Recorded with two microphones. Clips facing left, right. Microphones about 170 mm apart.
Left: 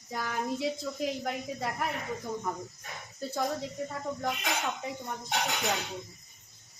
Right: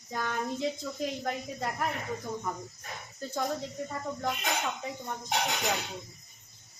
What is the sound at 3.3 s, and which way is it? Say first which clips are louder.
Speech: even; centre (ahead or behind).